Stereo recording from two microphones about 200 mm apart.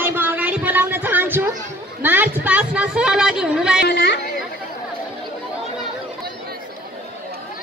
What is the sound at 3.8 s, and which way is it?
Chatter, 60° left (ahead or behind).